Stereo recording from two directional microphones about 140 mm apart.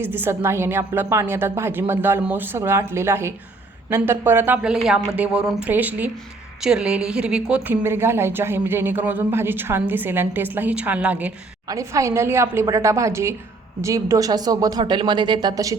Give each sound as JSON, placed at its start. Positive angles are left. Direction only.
{"t": 0.0, "sound": "speech", "side_deg": -15}
{"t": 11.7, "sound": "speech", "side_deg": -25}